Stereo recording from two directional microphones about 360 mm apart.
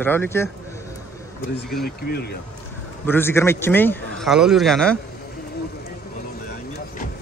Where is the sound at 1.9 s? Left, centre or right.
Left.